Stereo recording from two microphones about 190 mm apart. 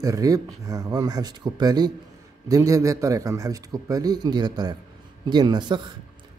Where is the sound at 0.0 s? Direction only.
20° right (ahead or behind).